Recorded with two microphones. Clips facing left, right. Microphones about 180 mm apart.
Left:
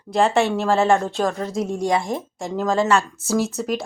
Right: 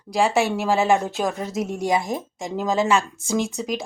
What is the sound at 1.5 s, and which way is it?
Speech, 25° left (ahead or behind).